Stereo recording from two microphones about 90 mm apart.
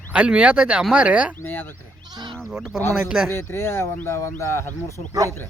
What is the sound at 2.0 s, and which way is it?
Speech, 55° right (ahead or behind).